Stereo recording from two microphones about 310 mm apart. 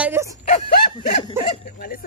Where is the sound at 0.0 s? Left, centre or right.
Centre.